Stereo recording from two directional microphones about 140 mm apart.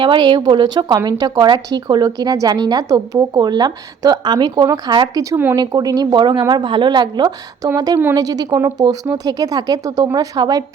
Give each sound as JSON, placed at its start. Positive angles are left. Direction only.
{"t": 0.0, "sound": "a woman's voice", "side_deg": -35}